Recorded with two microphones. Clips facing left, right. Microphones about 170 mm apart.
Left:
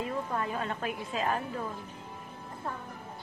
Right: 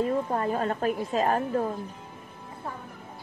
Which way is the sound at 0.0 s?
40° right (ahead or behind).